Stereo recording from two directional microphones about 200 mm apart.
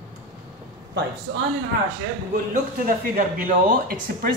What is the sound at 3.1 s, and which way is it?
Speech, 45° right (ahead or behind).